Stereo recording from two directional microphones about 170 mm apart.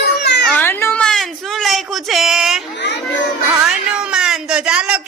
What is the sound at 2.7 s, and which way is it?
Children playing, 90° left.